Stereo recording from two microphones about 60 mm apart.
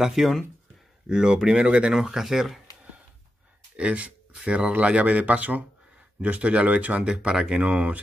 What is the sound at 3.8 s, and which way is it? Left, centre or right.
Speech, centre.